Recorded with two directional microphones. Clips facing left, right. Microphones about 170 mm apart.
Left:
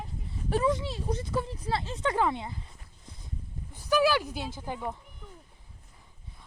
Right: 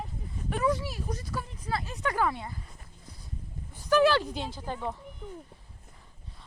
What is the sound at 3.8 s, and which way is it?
Speech, 10° left (ahead or behind).